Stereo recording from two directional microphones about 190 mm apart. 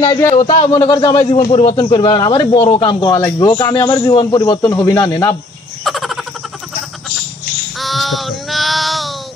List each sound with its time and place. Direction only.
0.3 s a man's voice: 30° left (ahead or behind)
5.9 s frog: centre (ahead or behind)
7.8 s child singing: centre (ahead or behind)